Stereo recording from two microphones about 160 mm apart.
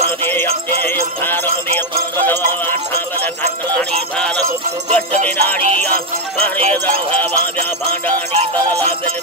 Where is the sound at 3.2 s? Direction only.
10° left (ahead or behind).